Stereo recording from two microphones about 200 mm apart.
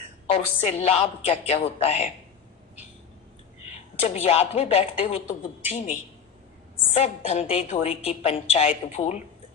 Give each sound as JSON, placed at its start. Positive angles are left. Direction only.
{"t": 0.3, "sound": "a woman's voice", "side_deg": 30}
{"t": 3.6, "sound": "a woman's voice", "side_deg": 35}